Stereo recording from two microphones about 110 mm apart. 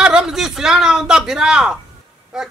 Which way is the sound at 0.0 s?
10° right (ahead or behind).